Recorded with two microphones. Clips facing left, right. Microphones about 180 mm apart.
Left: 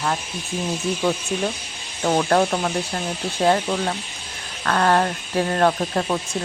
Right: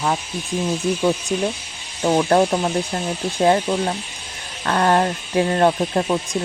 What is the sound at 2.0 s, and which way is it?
Speech, 15° right (ahead or behind).